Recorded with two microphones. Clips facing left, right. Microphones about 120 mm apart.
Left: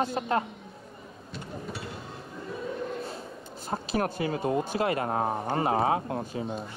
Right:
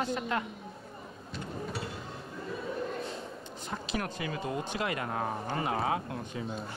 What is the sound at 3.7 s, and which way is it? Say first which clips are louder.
Speech: left 7 dB; 40° left (ahead or behind).